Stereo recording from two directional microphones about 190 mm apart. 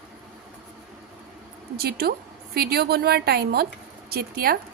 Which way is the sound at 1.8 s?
55° right (ahead or behind).